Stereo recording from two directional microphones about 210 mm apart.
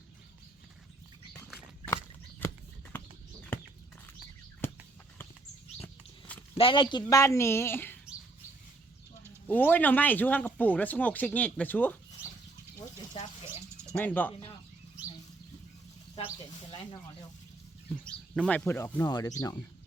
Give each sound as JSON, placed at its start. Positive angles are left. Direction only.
{"t": 2.4, "sound": "a sound", "side_deg": 10}
{"t": 5.8, "sound": "walk", "side_deg": 5}
{"t": 6.6, "sound": "speech", "side_deg": 25}
{"t": 7.1, "sound": "speech", "side_deg": 15}
{"t": 9.5, "sound": "speech", "side_deg": 10}
{"t": 13.1, "sound": "bird", "side_deg": 25}
{"t": 13.9, "sound": "speech", "side_deg": 10}
{"t": 16.7, "sound": "speech", "side_deg": 20}
{"t": 17.8, "sound": "speech", "side_deg": 5}